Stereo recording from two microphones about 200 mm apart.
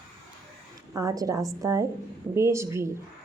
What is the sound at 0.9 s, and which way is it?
Speech, 15° right (ahead or behind).